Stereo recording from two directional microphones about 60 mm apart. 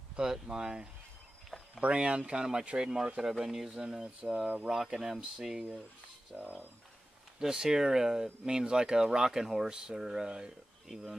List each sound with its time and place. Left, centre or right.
0.1 s speech: centre
6.3 s speech: right
7.3 s speech: centre